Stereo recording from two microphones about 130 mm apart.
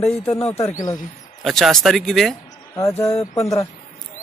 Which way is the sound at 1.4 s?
Centre (ahead or behind).